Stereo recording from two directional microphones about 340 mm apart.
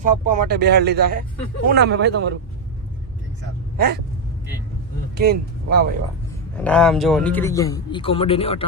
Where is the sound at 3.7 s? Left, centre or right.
Right.